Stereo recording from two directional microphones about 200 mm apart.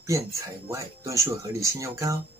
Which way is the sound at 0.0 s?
15° right (ahead or behind).